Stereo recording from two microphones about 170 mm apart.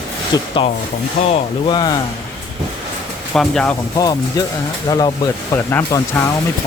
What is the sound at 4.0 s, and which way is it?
Speech, 20° left (ahead or behind).